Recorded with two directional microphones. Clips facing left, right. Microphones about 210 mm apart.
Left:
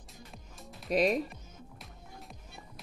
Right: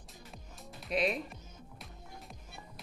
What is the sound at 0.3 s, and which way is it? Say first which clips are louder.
Music: right 2 dB; centre (ahead or behind).